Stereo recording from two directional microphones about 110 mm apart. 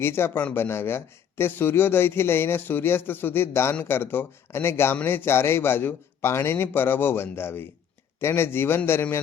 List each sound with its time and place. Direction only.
0.0 s speech: 20° left (ahead or behind)